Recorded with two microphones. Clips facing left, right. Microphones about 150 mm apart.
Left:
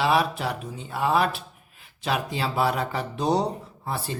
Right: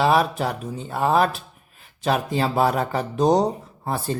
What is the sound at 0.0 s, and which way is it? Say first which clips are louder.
Speech: right 4 dB; 40° right (ahead or behind).